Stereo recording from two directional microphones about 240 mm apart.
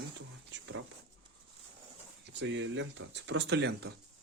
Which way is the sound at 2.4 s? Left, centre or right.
Right.